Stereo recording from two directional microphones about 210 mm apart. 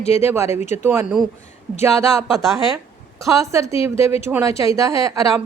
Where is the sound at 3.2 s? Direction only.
15° right (ahead or behind).